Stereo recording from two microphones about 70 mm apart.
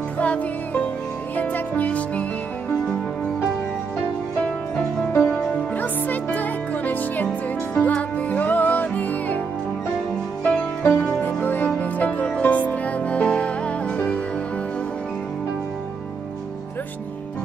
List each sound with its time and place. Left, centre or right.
0.2 s music: centre
4.4 s music: centre
10.4 s music: centre